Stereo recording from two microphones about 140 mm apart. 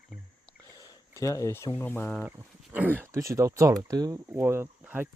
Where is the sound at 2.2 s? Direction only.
10° right (ahead or behind).